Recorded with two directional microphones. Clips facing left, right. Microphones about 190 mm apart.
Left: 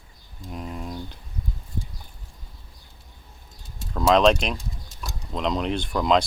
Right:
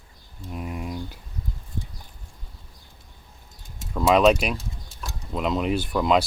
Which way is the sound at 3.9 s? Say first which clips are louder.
Even; 5° right (ahead or behind).